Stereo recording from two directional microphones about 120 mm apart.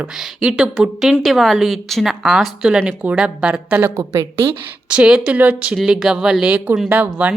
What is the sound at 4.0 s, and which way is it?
Speech, 25° right (ahead or behind).